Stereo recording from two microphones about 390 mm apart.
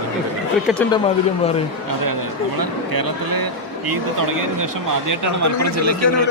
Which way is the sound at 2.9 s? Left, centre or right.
Right.